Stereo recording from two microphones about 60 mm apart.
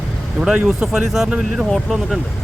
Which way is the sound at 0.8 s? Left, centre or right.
Centre.